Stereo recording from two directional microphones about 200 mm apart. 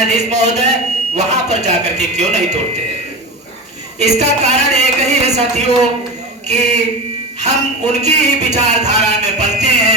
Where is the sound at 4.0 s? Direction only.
35° right (ahead or behind).